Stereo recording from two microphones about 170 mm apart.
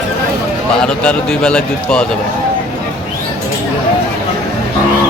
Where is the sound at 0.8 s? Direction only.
5° left (ahead or behind).